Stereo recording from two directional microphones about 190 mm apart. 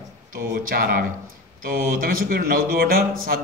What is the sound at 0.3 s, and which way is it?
A man's voice, 50° right (ahead or behind).